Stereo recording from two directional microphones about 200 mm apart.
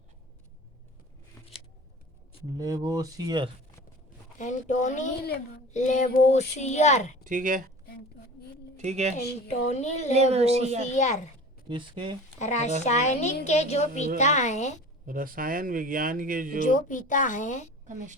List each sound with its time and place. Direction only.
2.6 s speech: 20° right (ahead or behind)
4.4 s speech: 35° left (ahead or behind)
7.3 s speech: 40° right (ahead or behind)
8.7 s speech: 35° right (ahead or behind)
9.5 s speech: 35° left (ahead or behind)
10.2 s speech: 30° right (ahead or behind)
10.9 s speech: 35° left (ahead or behind)
11.7 s speech: 25° right (ahead or behind)
12.4 s speech: 35° left (ahead or behind)
15.0 s speech: 45° right (ahead or behind)
16.6 s speech: 40° left (ahead or behind)
17.8 s speech: 40° right (ahead or behind)